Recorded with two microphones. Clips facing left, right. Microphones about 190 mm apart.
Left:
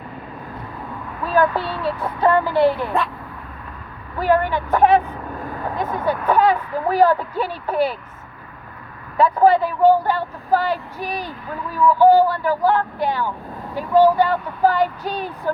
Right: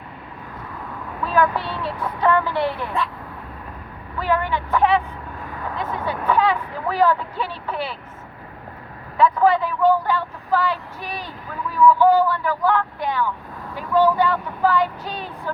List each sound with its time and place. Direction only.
1.3 s speech: 40° left (ahead or behind)
4.2 s speech: 45° left (ahead or behind)
9.1 s speech: 35° left (ahead or behind)